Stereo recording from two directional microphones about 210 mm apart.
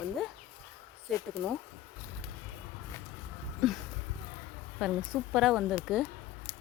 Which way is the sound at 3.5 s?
Centre (ahead or behind).